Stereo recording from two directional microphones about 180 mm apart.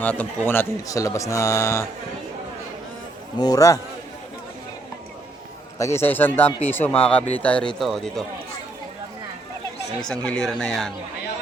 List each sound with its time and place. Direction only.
0.0 s speech: 10° left (ahead or behind)
3.3 s a man's voice: 20° left (ahead or behind)
5.8 s speech: 15° left (ahead or behind)
10.1 s speech: 5° left (ahead or behind)